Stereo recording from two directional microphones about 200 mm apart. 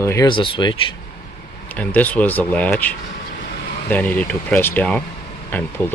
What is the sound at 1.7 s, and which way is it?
Speech, 10° left (ahead or behind).